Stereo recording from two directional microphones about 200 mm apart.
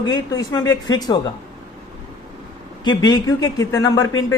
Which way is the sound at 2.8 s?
20° left (ahead or behind).